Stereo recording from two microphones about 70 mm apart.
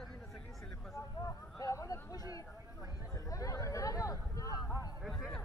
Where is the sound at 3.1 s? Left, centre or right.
Left.